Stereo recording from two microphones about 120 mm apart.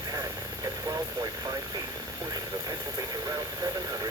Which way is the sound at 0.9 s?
35° right (ahead or behind).